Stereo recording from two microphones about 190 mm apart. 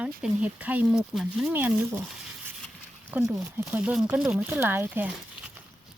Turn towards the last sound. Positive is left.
turn(degrees=-10)  # may be behind; listen again after turning